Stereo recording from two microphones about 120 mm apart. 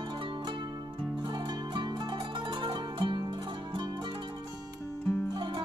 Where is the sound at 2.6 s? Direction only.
45° right (ahead or behind).